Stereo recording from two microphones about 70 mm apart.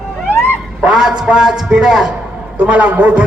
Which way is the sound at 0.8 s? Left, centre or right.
Centre.